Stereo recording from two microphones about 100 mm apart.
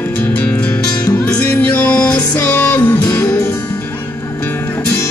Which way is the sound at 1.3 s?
15° left (ahead or behind).